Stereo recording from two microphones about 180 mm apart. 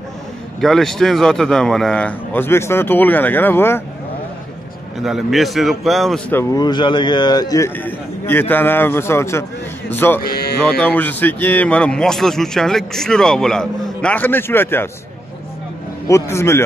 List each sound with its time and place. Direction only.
0.6 s a man's voice: centre (ahead or behind)
4.9 s a man's voice: centre (ahead or behind)
6.5 s a man's voice: 25° left (ahead or behind)
10.2 s music: 60° left (ahead or behind)
10.6 s a man's voice: 5° left (ahead or behind)
16.1 s a man's voice: 15° left (ahead or behind)